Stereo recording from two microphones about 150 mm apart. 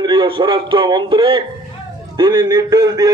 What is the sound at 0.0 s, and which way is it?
A man's voice, 30° right (ahead or behind).